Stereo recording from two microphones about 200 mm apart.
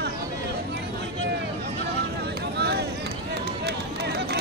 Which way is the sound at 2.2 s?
55° right (ahead or behind).